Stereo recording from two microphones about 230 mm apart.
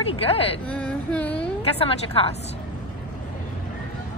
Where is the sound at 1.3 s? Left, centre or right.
Left.